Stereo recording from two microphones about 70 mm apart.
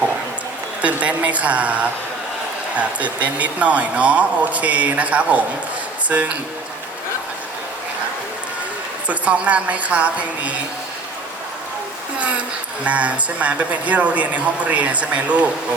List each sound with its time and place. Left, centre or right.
0.8 s speech: centre
9.0 s speech: centre
12.8 s speech: centre